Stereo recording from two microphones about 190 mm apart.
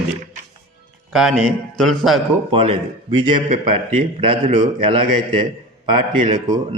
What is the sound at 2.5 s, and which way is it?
A man's voice, 30° right (ahead or behind).